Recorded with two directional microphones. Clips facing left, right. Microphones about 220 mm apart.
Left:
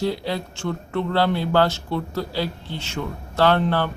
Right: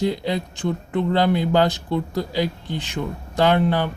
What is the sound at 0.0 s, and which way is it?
Speech, 20° right (ahead or behind).